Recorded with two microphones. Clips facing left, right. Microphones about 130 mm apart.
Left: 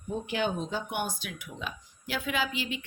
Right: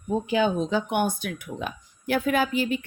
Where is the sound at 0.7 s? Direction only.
55° right (ahead or behind).